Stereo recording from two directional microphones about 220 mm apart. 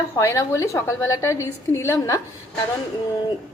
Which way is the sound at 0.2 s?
15° left (ahead or behind).